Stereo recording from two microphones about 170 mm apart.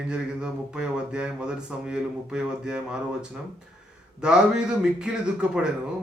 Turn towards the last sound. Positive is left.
turn(degrees=-5)  # may be behind; listen again after turning